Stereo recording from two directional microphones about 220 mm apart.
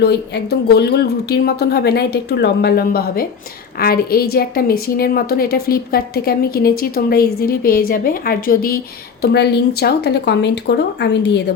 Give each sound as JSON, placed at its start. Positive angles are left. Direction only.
{"t": 0.7, "sound": "a woman's voice", "side_deg": 50}